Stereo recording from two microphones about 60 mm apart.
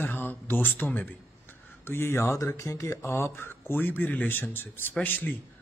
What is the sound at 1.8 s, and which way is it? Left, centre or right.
A man's voice, left.